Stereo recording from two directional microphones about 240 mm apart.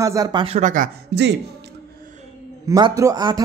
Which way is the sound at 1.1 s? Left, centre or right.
Right.